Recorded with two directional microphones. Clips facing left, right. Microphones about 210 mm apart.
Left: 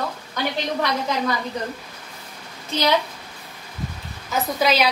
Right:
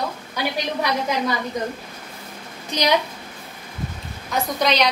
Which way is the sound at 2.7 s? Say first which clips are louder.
Even; 15° right (ahead or behind).